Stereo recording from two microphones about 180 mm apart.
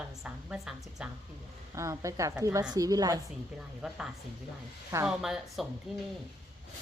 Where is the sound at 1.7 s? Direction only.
15° right (ahead or behind).